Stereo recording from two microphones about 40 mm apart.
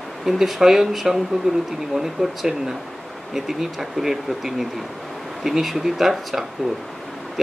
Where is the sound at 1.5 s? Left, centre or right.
Right.